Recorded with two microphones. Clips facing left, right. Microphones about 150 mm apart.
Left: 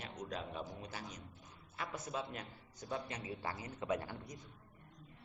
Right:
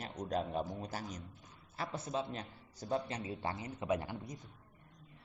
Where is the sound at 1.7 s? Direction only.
30° right (ahead or behind).